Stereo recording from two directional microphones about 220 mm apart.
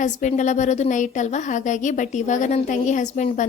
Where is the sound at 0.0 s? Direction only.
35° left (ahead or behind).